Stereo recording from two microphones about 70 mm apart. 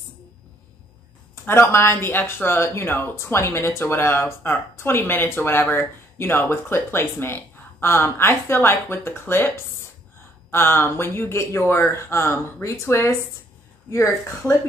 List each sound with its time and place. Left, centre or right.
1.3 s speech: left
10.5 s speech: left